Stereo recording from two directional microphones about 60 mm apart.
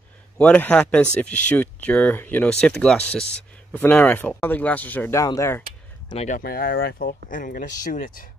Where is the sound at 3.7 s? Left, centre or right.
Left.